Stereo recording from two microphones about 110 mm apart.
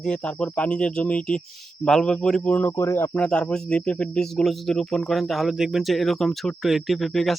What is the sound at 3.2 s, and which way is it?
Speech, 10° left (ahead or behind).